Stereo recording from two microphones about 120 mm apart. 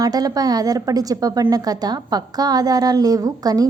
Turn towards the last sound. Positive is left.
turn(degrees=-30)  # may be behind; listen again after turning